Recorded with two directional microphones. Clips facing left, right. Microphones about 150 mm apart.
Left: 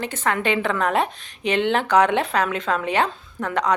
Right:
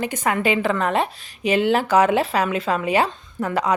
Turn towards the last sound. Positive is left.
turn(degrees=-5)  # may be behind; listen again after turning